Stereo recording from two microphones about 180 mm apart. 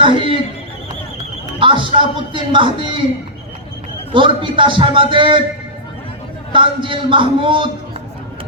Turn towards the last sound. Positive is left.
turn(degrees=-30)  # may be behind; listen again after turning